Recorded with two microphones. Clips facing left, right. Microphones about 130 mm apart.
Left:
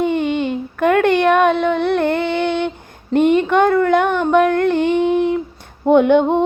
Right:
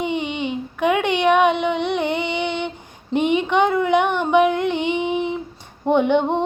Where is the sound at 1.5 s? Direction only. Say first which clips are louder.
Left 4 dB; 15° right (ahead or behind).